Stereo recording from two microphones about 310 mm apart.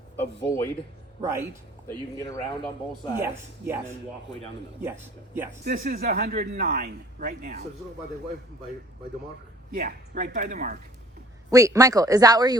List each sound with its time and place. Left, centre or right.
0.2 s speech: centre
1.2 s speech: centre
1.9 s speech: centre
4.8 s speech: centre
5.6 s speech: right
9.7 s speech: right
11.5 s speech: centre